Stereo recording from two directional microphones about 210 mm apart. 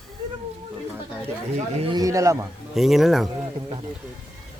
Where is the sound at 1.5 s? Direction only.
25° right (ahead or behind).